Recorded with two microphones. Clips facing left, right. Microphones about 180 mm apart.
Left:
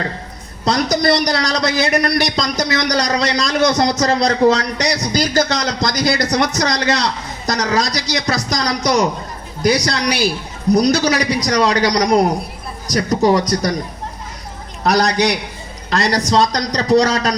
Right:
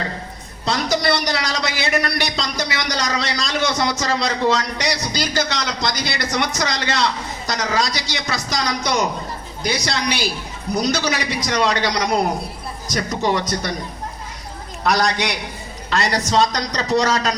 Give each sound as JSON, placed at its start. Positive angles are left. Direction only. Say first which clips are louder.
{"t": 0.6, "sound": "a man's voice", "louder": "left 4 dB", "side_deg": 40}
{"t": 14.8, "sound": "a man's voice", "louder": "left 4 dB", "side_deg": 40}